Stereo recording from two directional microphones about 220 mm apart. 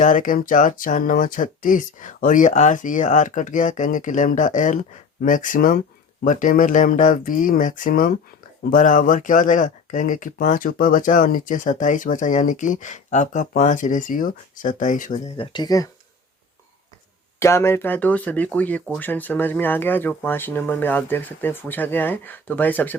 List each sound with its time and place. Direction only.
0.0 s speech: 35° left (ahead or behind); by 15.9 s 15° left (ahead or behind)
17.4 s speech: 10° left (ahead or behind)